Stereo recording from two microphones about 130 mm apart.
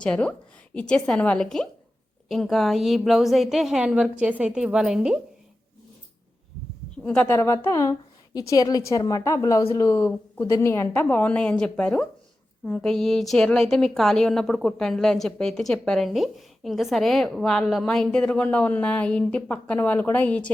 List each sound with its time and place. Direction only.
0.0 s a woman's voice: 10° left (ahead or behind)
7.0 s a woman's voice: 5° left (ahead or behind)
7.3 s a woman's voice: 25° left (ahead or behind)
10.1 s a woman's voice: 10° left (ahead or behind)